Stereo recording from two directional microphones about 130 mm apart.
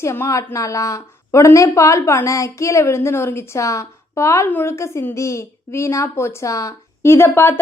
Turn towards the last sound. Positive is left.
turn(degrees=20)  # may be behind; listen again after turning